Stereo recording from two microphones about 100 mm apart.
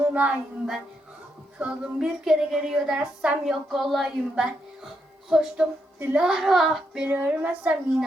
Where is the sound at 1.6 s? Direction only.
10° right (ahead or behind).